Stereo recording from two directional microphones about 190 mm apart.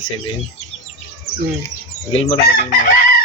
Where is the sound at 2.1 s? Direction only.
30° left (ahead or behind).